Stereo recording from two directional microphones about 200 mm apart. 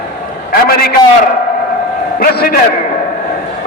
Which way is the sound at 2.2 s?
45° left (ahead or behind).